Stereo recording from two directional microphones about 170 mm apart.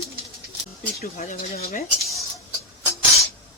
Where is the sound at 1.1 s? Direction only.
50° left (ahead or behind).